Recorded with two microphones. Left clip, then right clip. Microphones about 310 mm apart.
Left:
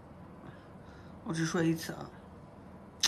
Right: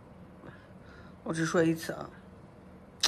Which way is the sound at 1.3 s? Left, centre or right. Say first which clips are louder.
Right 4 dB; centre.